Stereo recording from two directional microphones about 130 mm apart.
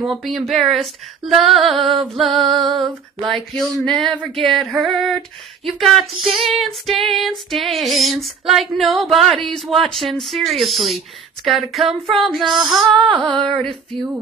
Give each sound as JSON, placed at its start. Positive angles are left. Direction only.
{"t": 0.0, "sound": "female singing", "side_deg": 0}
{"t": 1.8, "sound": "music", "side_deg": -45}
{"t": 2.0, "sound": "female singing", "side_deg": 0}